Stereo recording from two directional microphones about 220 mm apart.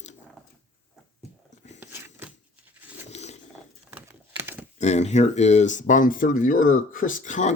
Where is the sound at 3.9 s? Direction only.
10° right (ahead or behind).